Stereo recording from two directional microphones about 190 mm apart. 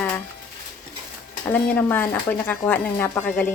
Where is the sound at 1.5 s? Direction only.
10° left (ahead or behind).